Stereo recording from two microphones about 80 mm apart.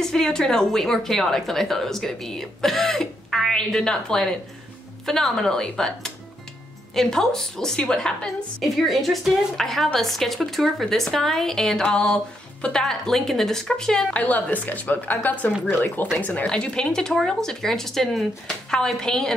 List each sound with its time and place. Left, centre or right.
0.0 s a woman's voice: centre
14.1 s speech: centre
16.4 s speech: centre